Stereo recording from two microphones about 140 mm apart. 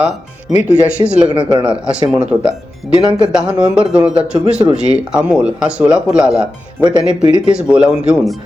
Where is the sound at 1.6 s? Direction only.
10° right (ahead or behind).